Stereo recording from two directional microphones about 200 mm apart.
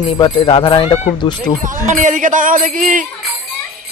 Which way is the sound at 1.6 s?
40° right (ahead or behind).